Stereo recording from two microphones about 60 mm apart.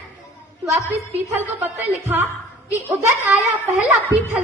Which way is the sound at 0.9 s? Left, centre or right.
Right.